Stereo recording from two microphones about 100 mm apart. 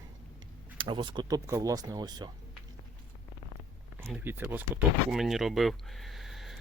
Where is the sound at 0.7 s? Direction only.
55° right (ahead or behind).